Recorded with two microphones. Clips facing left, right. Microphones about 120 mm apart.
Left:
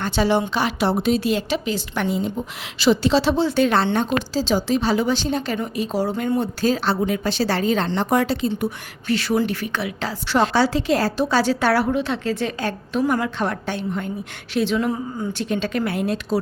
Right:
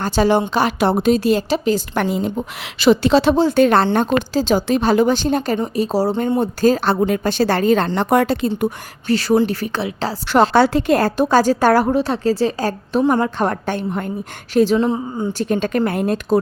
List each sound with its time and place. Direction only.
0.0 s a woman's voice: 45° right (ahead or behind)
5.5 s speech: 35° right (ahead or behind)
6.6 s a woman's voice: 45° right (ahead or behind)
8.6 s speech: 40° right (ahead or behind)
10.5 s a woman's voice: 55° right (ahead or behind); by 14.8 s 40° right (ahead or behind)
14.8 s a woman's voice: 25° right (ahead or behind)
15.3 s a woman's voice: 40° right (ahead or behind)